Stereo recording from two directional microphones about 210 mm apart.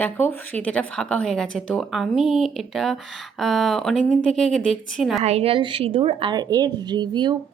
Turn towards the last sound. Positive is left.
turn(degrees=-20)  # may be behind; listen again after turning